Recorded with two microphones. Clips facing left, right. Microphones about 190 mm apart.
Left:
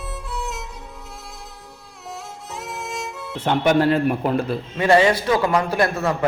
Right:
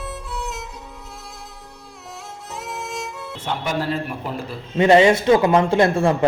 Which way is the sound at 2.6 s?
Centre (ahead or behind).